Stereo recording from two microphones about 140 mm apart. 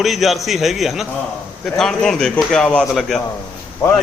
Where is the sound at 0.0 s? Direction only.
Centre (ahead or behind).